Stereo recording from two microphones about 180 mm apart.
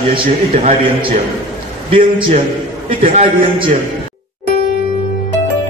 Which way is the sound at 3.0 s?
35° right (ahead or behind).